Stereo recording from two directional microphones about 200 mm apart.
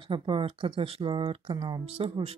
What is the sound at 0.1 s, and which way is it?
Speech, 25° right (ahead or behind).